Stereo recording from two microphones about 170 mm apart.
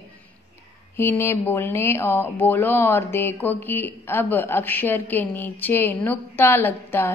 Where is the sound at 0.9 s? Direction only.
15° left (ahead or behind).